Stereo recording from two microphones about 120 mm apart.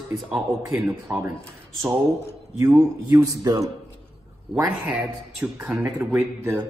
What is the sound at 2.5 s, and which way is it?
Speech, 20° right (ahead or behind).